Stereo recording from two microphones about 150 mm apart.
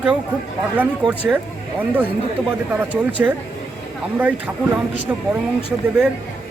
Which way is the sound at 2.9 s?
10° right (ahead or behind).